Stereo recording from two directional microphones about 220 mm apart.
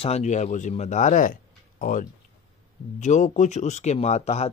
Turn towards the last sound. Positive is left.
turn(degrees=30)  # may be behind; listen again after turning